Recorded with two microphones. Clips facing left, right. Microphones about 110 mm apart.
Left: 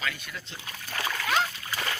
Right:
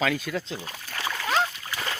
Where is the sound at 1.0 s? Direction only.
20° right (ahead or behind).